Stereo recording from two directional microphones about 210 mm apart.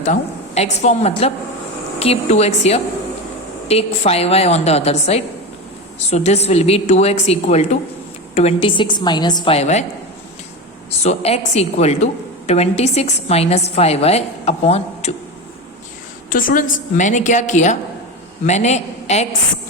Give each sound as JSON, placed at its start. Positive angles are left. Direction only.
{"t": 0.0, "sound": "a woman's voice", "side_deg": 35}
{"t": 11.0, "sound": "a woman's voice", "side_deg": 30}
{"t": 16.3, "sound": "a woman's voice", "side_deg": 40}